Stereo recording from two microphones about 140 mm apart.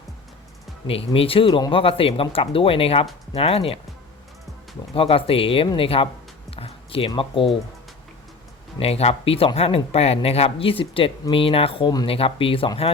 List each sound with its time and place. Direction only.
0.9 s speech: 45° left (ahead or behind)
4.9 s speech: 40° left (ahead or behind)
6.6 s a sound: 45° left (ahead or behind)
7.1 s speech: 40° left (ahead or behind)
8.8 s speech: 45° left (ahead or behind)